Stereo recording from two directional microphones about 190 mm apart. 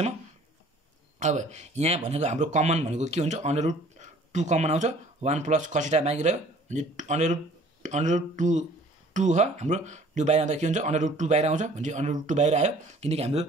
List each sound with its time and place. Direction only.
1.2 s speech: 40° right (ahead or behind)